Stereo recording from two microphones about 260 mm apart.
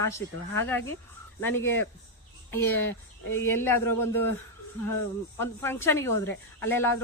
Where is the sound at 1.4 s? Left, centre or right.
Centre.